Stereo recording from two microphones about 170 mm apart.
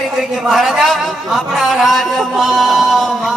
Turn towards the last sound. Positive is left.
turn(degrees=0)  # may be behind; listen again after turning